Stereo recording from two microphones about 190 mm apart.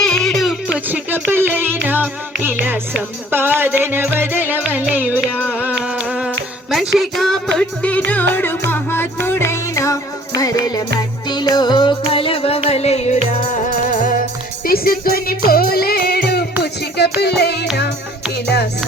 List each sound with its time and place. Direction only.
0.0 s music: 5° left (ahead or behind)
0.9 s music: 10° right (ahead or behind); by 17.7 s 60° left (ahead or behind)